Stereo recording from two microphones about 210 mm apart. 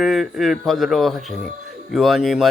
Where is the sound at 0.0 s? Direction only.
Centre (ahead or behind).